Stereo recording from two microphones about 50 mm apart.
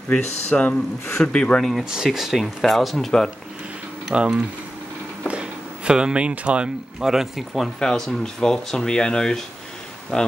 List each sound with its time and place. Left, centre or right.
0.1 s speech: left
1.6 s speech: centre
2.6 s speech: centre
4.1 s speech: centre
5.3 s speech: centre
7.1 s speech: centre